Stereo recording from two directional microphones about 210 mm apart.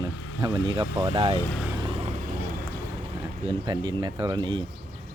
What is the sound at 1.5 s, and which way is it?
Speech, 5° right (ahead or behind).